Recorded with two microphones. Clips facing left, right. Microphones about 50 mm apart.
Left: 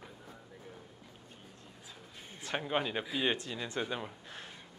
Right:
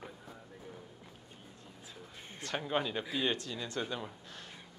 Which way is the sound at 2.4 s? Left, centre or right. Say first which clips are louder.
Left 1 dB; centre.